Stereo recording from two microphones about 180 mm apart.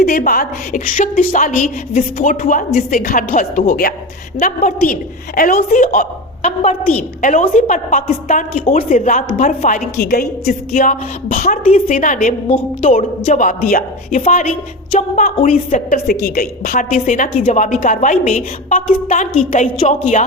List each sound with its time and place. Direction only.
0.0 s a woman's voice: 50° left (ahead or behind)
1.9 s a woman's voice: 35° left (ahead or behind)
2.2 s a woman's voice: 50° left (ahead or behind)
8.6 s a woman's voice: 30° left (ahead or behind)
8.9 s a woman's voice: 45° left (ahead or behind)
12.5 s a woman's voice: 35° left (ahead or behind); by 14.2 s 50° left (ahead or behind)
14.2 s a woman's voice: 35° left (ahead or behind)
16.2 s a woman's voice: 55° left (ahead or behind)
16.9 s a woman's voice: 40° left (ahead or behind)